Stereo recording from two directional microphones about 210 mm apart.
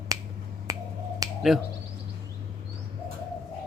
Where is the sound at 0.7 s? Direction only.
15° right (ahead or behind).